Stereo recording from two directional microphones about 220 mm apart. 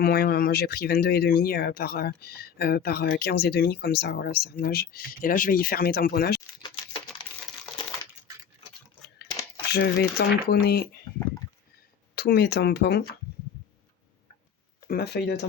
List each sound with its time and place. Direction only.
0.0 s speech: 45° left (ahead or behind)
9.7 s speech: 45° left (ahead or behind)
12.1 s speech: 45° left (ahead or behind)
14.8 s speech: 45° left (ahead or behind)